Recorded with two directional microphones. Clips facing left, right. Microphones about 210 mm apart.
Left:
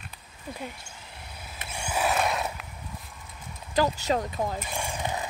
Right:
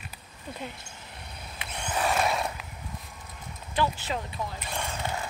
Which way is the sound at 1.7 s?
10° left (ahead or behind).